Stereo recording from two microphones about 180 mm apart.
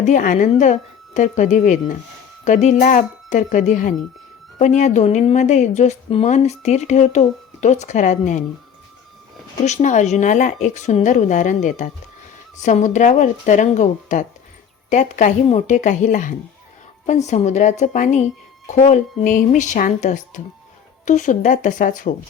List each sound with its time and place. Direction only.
0.0 s a woman's voice: 45° left (ahead or behind)
9.6 s a woman's voice: 40° left (ahead or behind)